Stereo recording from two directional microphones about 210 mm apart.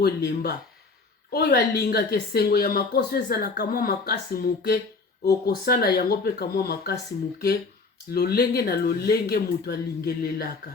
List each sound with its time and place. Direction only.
0.0 s speech: 50° left (ahead or behind)
8.1 s speech: 45° left (ahead or behind)